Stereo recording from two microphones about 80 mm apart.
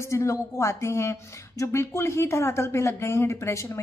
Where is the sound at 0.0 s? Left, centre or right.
Left.